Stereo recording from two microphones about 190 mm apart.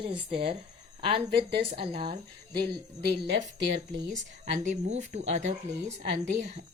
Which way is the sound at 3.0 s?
65° right (ahead or behind).